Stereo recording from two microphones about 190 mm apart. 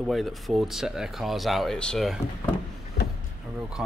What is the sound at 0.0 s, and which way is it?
Speech, centre (ahead or behind).